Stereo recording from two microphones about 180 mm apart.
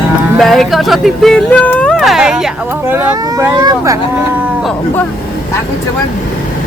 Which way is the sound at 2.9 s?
15° right (ahead or behind).